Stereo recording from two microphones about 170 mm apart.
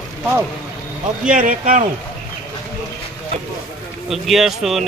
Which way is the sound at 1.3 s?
55° right (ahead or behind).